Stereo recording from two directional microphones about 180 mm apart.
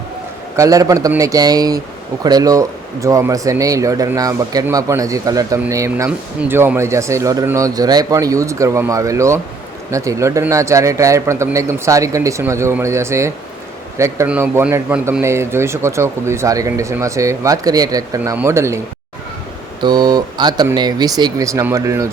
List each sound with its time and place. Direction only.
0.5 s a man's voice: 20° right (ahead or behind)
19.8 s speech: 25° right (ahead or behind)